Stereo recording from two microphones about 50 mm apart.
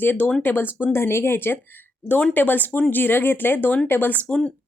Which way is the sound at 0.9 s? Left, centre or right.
Left.